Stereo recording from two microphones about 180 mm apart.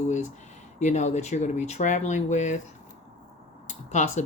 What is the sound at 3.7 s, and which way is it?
Speech, 40° left (ahead or behind).